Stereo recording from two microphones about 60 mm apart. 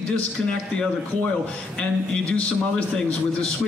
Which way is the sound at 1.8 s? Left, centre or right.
Left.